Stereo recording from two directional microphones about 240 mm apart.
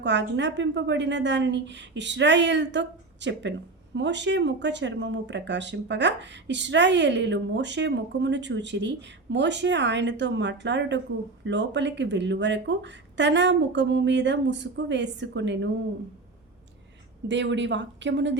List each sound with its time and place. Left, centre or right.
0.0 s speech: right
17.2 s speech: right